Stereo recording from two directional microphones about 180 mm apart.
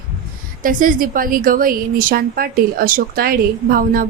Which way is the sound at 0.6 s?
50° right (ahead or behind).